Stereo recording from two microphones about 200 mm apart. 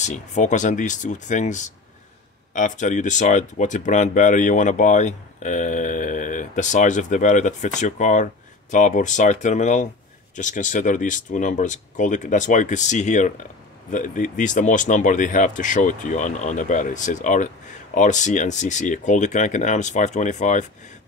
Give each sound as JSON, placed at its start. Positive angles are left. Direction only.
{"t": 0.0, "sound": "speech", "side_deg": 35}